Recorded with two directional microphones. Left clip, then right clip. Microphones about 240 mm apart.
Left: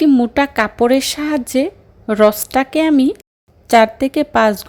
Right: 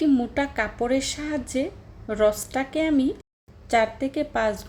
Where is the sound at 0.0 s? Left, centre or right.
Left.